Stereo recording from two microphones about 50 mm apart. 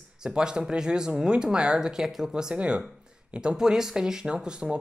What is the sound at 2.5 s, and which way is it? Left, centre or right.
Speech, right.